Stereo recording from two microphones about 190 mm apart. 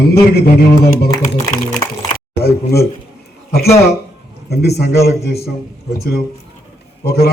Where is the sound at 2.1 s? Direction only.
55° left (ahead or behind).